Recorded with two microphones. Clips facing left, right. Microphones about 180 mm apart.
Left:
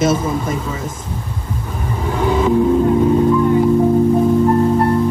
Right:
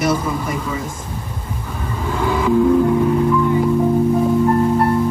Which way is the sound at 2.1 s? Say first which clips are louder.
Left 2 dB; 20° left (ahead or behind).